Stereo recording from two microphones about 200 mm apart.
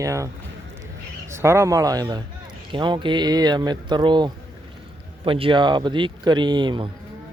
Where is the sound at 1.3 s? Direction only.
15° right (ahead or behind).